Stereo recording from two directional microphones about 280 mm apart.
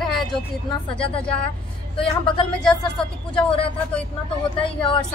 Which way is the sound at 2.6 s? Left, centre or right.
Centre.